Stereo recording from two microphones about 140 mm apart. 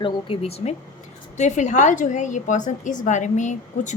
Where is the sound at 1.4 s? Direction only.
60° left (ahead or behind).